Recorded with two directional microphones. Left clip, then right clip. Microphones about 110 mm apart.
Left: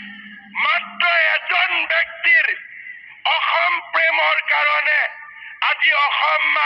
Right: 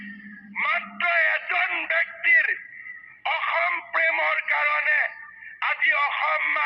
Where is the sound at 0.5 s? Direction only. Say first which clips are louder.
Left 6 dB; 35° left (ahead or behind).